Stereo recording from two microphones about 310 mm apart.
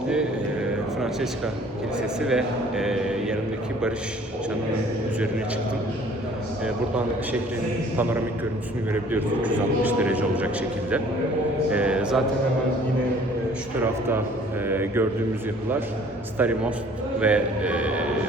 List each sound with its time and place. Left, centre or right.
2.0 s a man's voice: centre
8.9 s a man's voice: centre
11.7 s a man's voice: centre
14.7 s speech: centre
16.4 s a man's voice: centre